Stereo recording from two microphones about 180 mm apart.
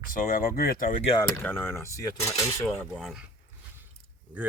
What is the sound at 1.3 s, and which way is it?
Speech, 10° left (ahead or behind).